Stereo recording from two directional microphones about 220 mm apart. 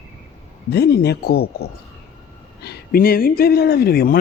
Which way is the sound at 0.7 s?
50° left (ahead or behind).